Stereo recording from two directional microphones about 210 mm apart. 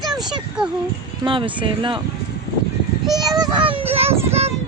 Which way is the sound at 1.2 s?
25° right (ahead or behind).